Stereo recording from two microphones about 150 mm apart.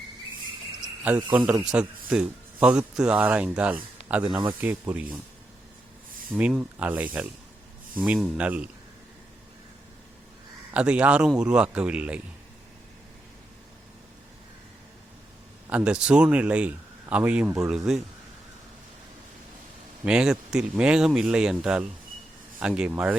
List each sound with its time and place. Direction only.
1.0 s speech: 10° right (ahead or behind)
4.3 s speech: 30° right (ahead or behind)
4.6 s speech: 10° right (ahead or behind)
6.3 s speech: 10° right (ahead or behind)
10.8 s speech: 10° right (ahead or behind)
15.7 s speech: 5° right (ahead or behind)
20.1 s speech: 5° right (ahead or behind)